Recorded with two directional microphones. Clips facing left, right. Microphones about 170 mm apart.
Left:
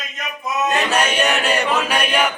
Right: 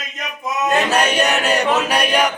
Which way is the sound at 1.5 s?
35° right (ahead or behind).